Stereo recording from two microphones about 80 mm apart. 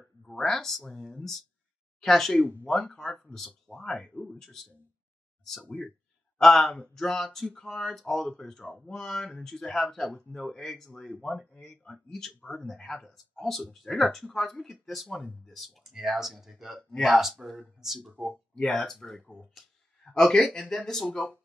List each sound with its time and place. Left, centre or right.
0.3 s speech: centre
6.4 s speech: centre
11.8 s speech: centre
18.5 s speech: centre